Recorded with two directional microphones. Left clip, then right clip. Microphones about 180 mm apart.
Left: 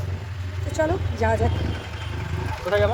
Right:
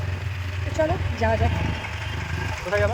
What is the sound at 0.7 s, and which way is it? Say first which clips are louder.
Speech: even; 10° left (ahead or behind).